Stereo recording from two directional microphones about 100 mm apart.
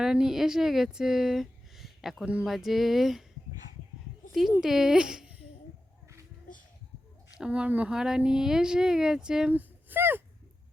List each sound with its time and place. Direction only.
0.0 s speech: 5° right (ahead or behind)
2.2 s speech: 15° right (ahead or behind)
2.5 s speech: centre (ahead or behind)
4.3 s speech: centre (ahead or behind)
7.3 s speech: 10° right (ahead or behind)
9.5 s speech: 20° right (ahead or behind)